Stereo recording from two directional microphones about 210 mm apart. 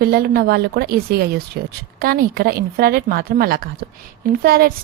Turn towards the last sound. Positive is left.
turn(degrees=-45)  # may be behind; listen again after turning